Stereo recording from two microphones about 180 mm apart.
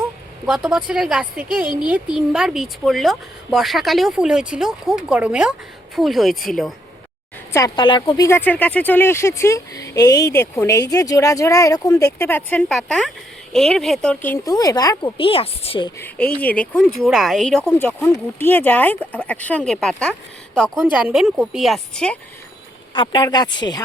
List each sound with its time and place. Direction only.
0.4 s speech: 5° right (ahead or behind)
7.5 s speech: 20° left (ahead or behind)
16.0 s speech: 10° left (ahead or behind)
23.0 s speech: 25° left (ahead or behind)